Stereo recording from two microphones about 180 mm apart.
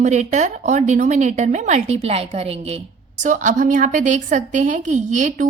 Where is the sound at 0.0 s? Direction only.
40° right (ahead or behind).